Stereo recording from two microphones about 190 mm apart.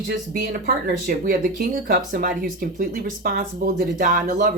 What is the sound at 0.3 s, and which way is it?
Speech, 50° right (ahead or behind).